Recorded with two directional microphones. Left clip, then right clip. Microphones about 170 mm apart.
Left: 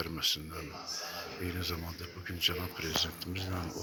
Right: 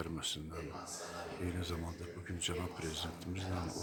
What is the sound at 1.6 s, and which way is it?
A man's voice, 5° left (ahead or behind).